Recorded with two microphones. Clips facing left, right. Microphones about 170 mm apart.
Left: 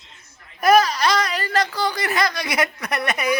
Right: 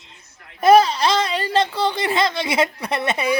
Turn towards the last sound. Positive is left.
turn(degrees=-25)  # may be behind; listen again after turning